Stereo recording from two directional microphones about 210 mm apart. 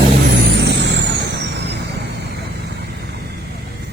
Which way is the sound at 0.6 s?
55° right (ahead or behind).